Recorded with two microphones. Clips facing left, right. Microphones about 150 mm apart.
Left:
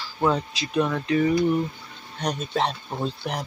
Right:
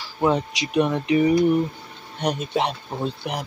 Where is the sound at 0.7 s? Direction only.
20° right (ahead or behind).